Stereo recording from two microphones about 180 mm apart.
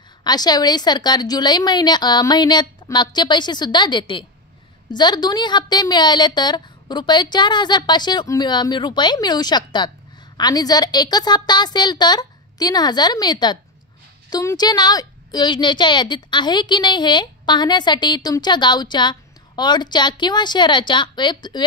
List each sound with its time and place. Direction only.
0.2 s a woman's voice: 20° left (ahead or behind)